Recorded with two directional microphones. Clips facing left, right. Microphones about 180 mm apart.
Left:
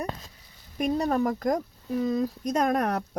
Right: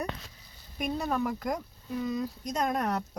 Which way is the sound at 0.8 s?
40° left (ahead or behind).